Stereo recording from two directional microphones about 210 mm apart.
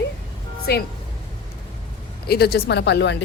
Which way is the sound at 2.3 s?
50° left (ahead or behind).